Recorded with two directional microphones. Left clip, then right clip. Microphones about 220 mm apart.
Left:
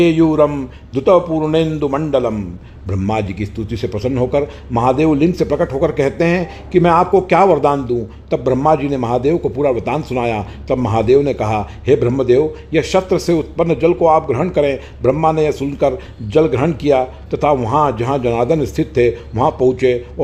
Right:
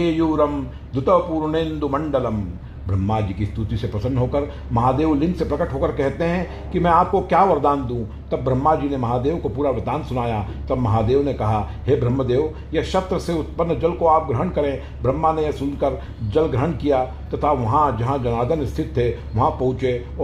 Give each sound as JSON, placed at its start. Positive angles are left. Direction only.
{"t": 0.0, "sound": "a man's voice", "side_deg": 35}